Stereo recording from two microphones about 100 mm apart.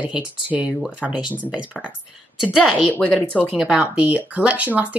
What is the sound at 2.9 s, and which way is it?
Speech, 15° left (ahead or behind).